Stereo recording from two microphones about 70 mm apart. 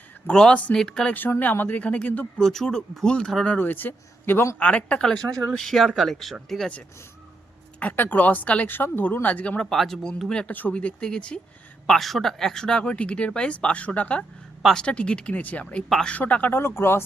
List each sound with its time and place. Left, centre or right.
0.3 s speech: centre
1.1 s speech: left
2.4 s speech: centre
3.5 s speech: left
4.6 s speech: centre
7.8 s speech: left
9.6 s speech: centre
10.5 s speech: left
14.6 s speech: centre
14.8 s speech: centre
15.9 s speech: centre
16.1 s speech: left